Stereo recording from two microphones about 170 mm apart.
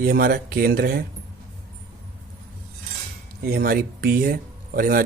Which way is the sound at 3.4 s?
60° right (ahead or behind).